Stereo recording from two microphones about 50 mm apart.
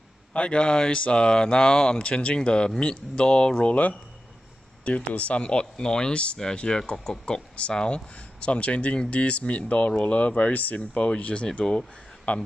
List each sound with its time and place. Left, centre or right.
0.3 s speech: left